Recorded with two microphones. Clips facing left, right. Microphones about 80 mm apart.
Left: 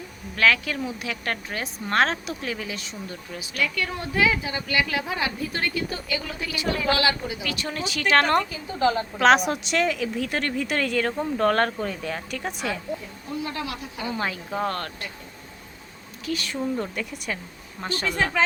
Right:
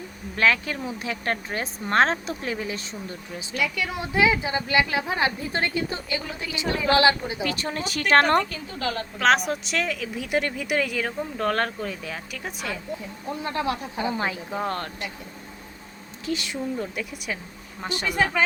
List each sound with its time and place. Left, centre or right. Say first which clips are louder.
0.3 s a woman's voice: left 1 dB; right
3.6 s a woman's voice: even; centre; by 7.8 s right
8.4 s a woman's voice: right 1 dB; centre
8.8 s a woman's voice: left 7 dB; left
9.1 s speech: even; centre
10.2 s speech: even; centre
13.4 s a woman's voice: right 6 dB; right
16.2 s a woman's voice: right 1 dB; right
16.7 s speech: left 1 dB; centre
18.1 s speech: right 1 dB; centre